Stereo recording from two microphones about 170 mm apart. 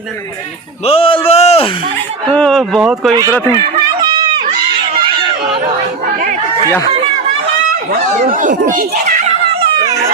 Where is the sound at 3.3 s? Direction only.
15° left (ahead or behind).